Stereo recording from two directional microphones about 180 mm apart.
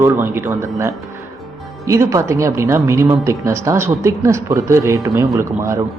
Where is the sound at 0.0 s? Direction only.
15° right (ahead or behind).